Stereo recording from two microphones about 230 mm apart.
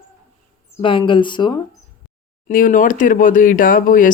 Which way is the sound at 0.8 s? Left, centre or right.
Left.